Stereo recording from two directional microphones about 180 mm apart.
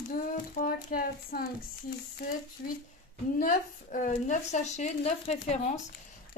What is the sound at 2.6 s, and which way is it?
A woman's voice, 50° left (ahead or behind).